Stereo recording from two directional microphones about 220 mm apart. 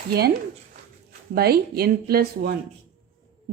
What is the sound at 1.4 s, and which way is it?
Speech, 45° right (ahead or behind).